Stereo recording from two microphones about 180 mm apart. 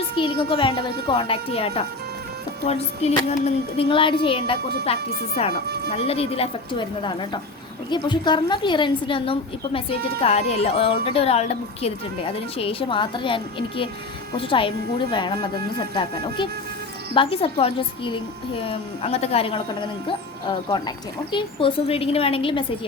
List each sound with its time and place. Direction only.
0.2 s a woman's voice: 30° left (ahead or behind)
5.6 s speech: 60° right (ahead or behind)
5.9 s a woman's voice: 35° left (ahead or behind)